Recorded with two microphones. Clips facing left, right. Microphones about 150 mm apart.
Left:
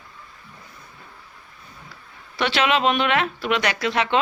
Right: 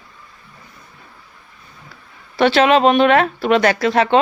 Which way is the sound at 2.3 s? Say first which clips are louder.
Right 8 dB; 40° right (ahead or behind).